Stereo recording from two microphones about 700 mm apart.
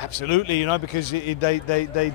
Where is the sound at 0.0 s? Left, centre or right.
Left.